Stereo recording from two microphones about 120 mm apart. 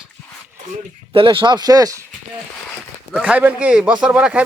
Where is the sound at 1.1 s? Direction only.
45° right (ahead or behind).